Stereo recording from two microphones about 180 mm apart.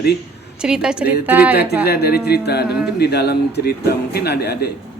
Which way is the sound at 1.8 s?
60° left (ahead or behind).